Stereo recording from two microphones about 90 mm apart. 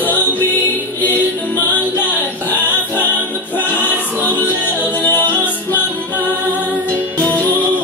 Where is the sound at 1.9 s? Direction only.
20° left (ahead or behind).